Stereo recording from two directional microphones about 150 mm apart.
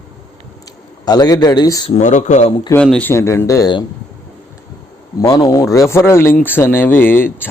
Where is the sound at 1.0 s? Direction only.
25° left (ahead or behind).